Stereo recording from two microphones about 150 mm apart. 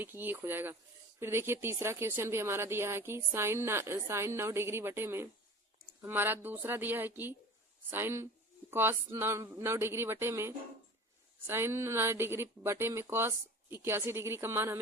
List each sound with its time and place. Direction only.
0.0 s speech: 15° right (ahead or behind)